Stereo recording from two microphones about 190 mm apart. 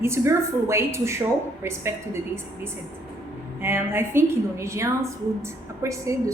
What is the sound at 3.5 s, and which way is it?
A woman's voice, 10° right (ahead or behind).